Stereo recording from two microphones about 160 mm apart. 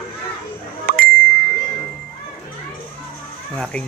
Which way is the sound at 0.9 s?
65° right (ahead or behind).